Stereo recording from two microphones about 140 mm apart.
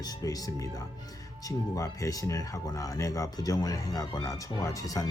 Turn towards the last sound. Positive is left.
turn(degrees=25)  # may be behind; listen again after turning